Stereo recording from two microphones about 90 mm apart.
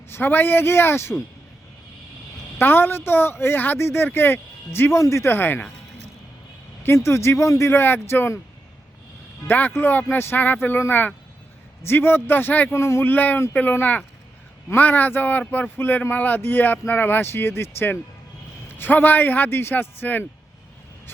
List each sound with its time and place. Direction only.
0.1 s speech: 25° left (ahead or behind)
2.6 s speech: 25° left (ahead or behind)
6.8 s speech: 30° left (ahead or behind)
9.5 s speech: 20° left (ahead or behind)